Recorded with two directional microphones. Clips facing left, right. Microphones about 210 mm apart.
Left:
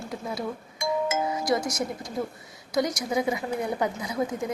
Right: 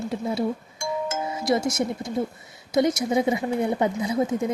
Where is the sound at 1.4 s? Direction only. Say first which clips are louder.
Right 8 dB; 25° right (ahead or behind).